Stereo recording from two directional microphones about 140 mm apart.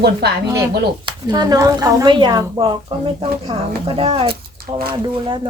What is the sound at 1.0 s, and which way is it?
A woman's voice, 30° right (ahead or behind).